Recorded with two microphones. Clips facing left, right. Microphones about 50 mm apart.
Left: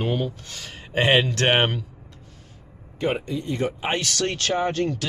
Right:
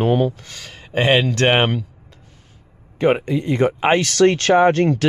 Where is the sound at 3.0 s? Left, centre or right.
Right.